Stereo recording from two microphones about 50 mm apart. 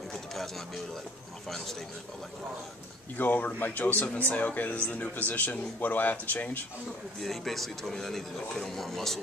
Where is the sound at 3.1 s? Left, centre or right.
Left.